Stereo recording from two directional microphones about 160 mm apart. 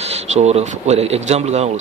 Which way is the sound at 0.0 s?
45° right (ahead or behind).